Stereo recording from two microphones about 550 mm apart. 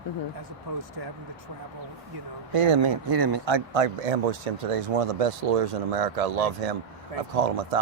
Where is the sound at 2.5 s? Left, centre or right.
Right.